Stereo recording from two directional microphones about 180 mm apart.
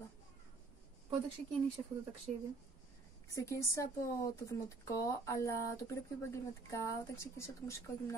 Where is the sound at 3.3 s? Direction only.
15° left (ahead or behind).